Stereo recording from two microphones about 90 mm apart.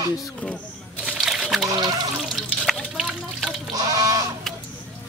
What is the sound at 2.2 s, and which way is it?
Water, centre (ahead or behind).